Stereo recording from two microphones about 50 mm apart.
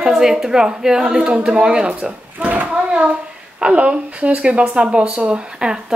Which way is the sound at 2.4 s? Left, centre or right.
Right.